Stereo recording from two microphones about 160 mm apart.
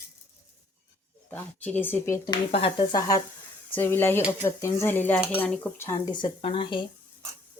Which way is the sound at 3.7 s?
15° left (ahead or behind).